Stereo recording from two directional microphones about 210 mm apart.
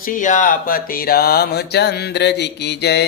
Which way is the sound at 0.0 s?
40° left (ahead or behind).